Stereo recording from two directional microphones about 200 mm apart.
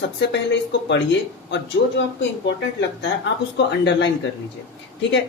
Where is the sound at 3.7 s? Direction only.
60° left (ahead or behind).